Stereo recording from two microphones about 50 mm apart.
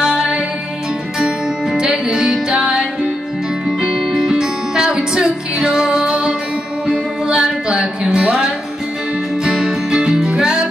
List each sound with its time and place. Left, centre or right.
0.0 s music: centre